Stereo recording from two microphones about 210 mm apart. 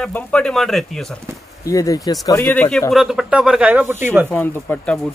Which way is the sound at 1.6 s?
15° left (ahead or behind).